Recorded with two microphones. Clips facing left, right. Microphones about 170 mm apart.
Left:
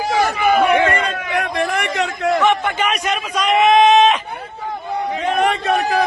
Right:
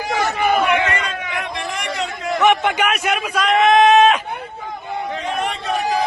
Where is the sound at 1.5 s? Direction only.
55° left (ahead or behind).